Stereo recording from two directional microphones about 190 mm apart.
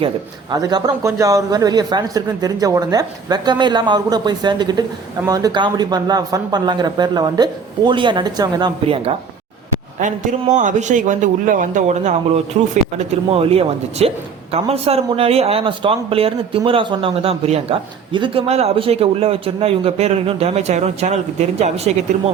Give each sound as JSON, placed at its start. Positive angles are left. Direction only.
{"t": 0.5, "sound": "a man's voice", "side_deg": -20}
{"t": 10.0, "sound": "speech", "side_deg": -40}